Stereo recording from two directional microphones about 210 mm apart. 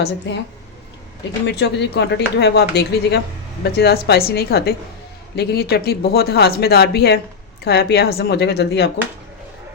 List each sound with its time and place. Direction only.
1.5 s speech: 55° left (ahead or behind)